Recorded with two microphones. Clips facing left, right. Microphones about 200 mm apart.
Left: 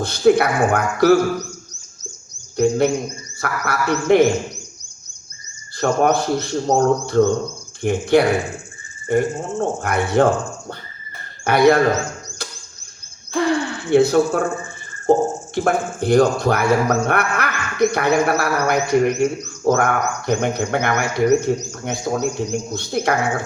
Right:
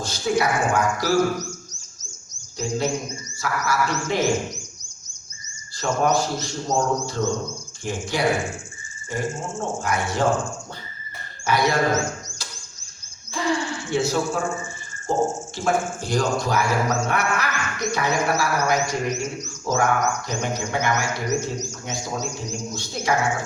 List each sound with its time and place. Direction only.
0.0 s a man's voice: 60° left (ahead or behind)
2.6 s a man's voice: 60° left (ahead or behind)
5.8 s a man's voice: 60° left (ahead or behind)
11.4 s a man's voice: 60° left (ahead or behind)
13.3 s gasp: 60° left (ahead or behind)
15.1 s a man's voice: 60° left (ahead or behind)